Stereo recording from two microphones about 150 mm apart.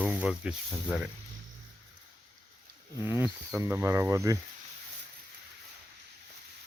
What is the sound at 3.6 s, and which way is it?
Speech, 15° right (ahead or behind).